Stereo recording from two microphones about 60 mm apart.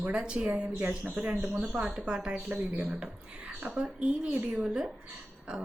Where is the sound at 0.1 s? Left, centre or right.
Centre.